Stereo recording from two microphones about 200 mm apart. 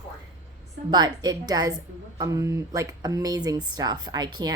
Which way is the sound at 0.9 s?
20° right (ahead or behind).